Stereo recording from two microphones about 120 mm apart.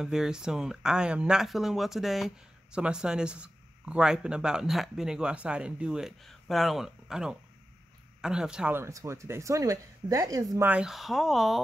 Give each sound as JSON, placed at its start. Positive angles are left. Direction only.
{"t": 0.0, "sound": "speech", "side_deg": -5}
{"t": 8.7, "sound": "speech", "side_deg": -25}
{"t": 10.6, "sound": "speech", "side_deg": -10}